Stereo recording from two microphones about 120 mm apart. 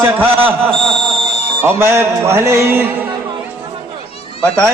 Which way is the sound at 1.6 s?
20° right (ahead or behind).